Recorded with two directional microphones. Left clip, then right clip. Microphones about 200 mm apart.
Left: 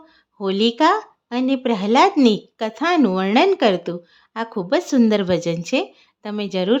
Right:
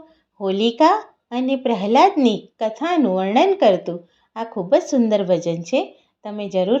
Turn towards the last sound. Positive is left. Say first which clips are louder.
# right 1 dB
turn(degrees=20)  # may be behind; listen again after turning